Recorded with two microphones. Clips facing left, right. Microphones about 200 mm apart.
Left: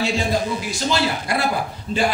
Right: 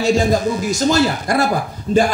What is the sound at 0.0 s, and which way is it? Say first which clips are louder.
A man's voice: right 6 dB; 45° right (ahead or behind).